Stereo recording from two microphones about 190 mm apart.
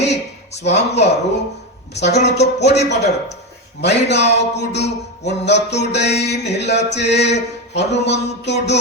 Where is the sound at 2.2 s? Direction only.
65° left (ahead or behind).